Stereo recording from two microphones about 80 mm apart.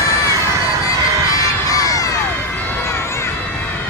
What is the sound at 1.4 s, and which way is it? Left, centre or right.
Crowd, left.